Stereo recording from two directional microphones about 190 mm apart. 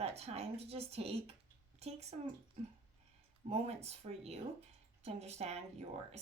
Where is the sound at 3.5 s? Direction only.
35° right (ahead or behind).